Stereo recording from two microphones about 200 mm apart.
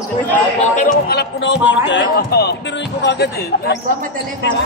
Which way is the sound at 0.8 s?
45° left (ahead or behind).